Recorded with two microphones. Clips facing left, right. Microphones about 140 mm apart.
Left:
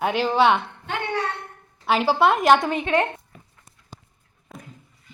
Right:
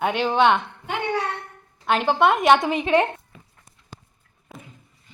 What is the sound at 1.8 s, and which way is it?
Speech, 5° left (ahead or behind).